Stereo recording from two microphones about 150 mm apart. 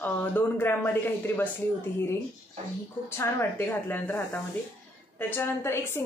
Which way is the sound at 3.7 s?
15° left (ahead or behind).